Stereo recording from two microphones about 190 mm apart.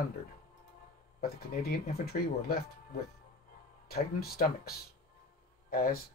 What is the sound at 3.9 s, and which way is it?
Speech, 55° left (ahead or behind).